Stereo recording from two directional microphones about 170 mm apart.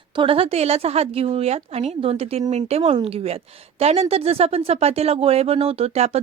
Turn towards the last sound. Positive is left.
turn(degrees=-35)  # may be behind; listen again after turning